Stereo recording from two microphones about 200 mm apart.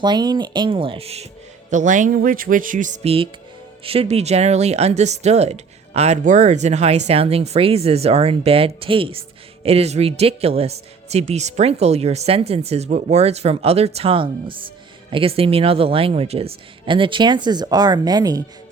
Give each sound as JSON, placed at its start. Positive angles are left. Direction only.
{"t": 0.0, "sound": "speech", "side_deg": -20}